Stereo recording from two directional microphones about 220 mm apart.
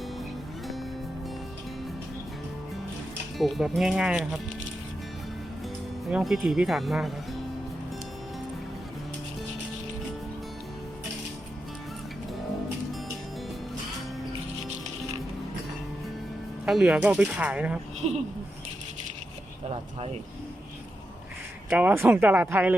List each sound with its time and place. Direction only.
3.3 s speech: centre (ahead or behind)
6.1 s speech: 5° right (ahead or behind)
16.6 s speech: centre (ahead or behind)
18.0 s speech: 30° right (ahead or behind)
21.7 s speech: 10° right (ahead or behind)